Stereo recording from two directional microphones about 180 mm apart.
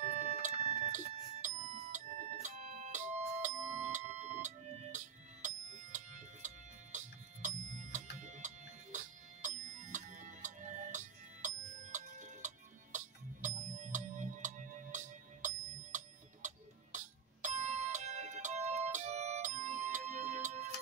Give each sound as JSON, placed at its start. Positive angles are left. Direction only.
{"t": 0.0, "sound": "music", "side_deg": -40}
{"t": 16.4, "sound": "music", "side_deg": -45}